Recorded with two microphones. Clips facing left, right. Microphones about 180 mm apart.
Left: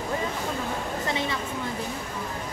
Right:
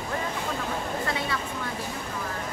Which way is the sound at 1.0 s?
20° left (ahead or behind).